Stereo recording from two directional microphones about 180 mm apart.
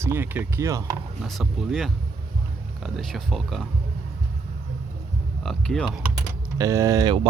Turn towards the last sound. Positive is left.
turn(degrees=-20)  # may be behind; listen again after turning